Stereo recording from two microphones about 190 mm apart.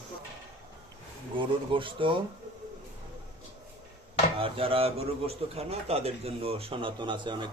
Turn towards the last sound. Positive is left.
turn(degrees=-25)  # may be behind; listen again after turning